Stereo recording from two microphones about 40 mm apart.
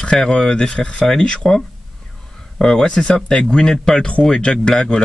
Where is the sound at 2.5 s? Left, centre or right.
Centre.